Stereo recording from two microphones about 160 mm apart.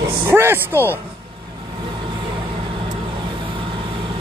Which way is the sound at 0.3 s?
15° right (ahead or behind).